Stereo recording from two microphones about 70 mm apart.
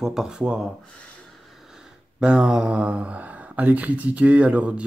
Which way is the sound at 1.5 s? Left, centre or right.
Centre.